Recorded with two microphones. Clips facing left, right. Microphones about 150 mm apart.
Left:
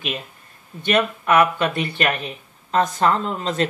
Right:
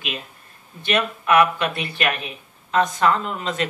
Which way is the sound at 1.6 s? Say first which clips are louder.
Left 3 dB; 40° left (ahead or behind).